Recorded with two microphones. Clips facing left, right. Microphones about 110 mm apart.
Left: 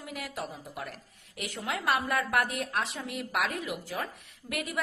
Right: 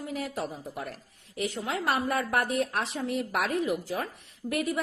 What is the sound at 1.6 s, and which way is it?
A woman's voice, 25° right (ahead or behind).